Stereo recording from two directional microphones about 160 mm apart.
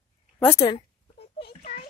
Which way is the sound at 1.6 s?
45° left (ahead or behind).